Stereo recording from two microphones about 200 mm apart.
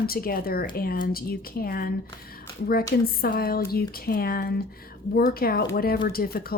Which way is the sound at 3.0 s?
50° left (ahead or behind).